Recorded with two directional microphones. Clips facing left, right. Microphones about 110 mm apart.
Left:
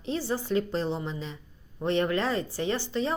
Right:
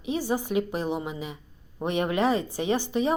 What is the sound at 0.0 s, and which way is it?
A woman's voice, 15° right (ahead or behind).